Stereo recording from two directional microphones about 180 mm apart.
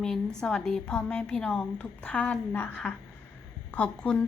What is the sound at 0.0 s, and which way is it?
A woman's voice, 5° left (ahead or behind).